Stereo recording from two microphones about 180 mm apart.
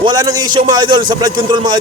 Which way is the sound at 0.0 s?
20° right (ahead or behind).